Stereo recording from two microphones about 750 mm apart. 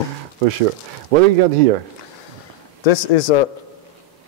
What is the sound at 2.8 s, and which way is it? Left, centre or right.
Speech, left.